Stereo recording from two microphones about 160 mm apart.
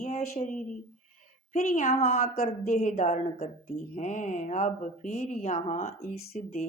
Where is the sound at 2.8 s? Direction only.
50° left (ahead or behind).